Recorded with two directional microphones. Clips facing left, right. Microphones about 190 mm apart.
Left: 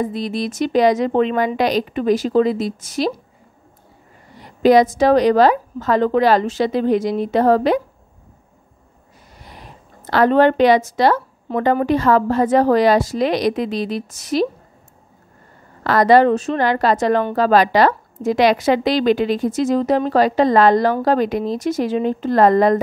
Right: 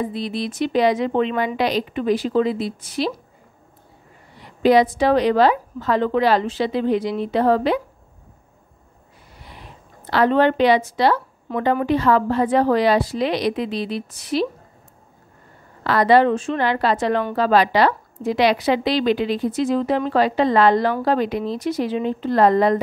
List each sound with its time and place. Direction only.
0.0 s a woman's voice: 45° left (ahead or behind)
4.4 s a woman's voice: 45° left (ahead or behind)
10.0 s a woman's voice: 45° left (ahead or behind)
15.8 s a woman's voice: 45° left (ahead or behind)